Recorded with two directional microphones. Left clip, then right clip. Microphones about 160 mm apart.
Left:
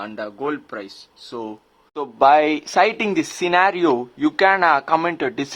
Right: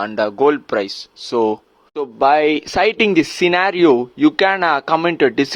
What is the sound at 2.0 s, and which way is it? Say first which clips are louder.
Speech: even; 25° right (ahead or behind).